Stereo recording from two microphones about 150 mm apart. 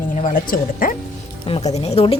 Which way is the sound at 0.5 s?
65° left (ahead or behind).